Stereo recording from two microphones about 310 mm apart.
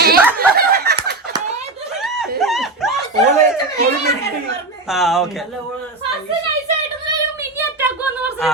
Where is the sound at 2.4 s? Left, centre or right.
Centre.